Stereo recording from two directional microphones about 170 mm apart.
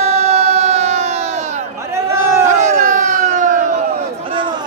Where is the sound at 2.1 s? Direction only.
15° right (ahead or behind).